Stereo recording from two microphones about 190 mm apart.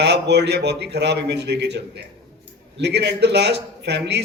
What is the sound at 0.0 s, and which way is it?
A man's voice, 60° right (ahead or behind).